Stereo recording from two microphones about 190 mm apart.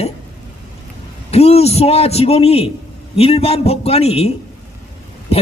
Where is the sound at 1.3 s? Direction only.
30° left (ahead or behind).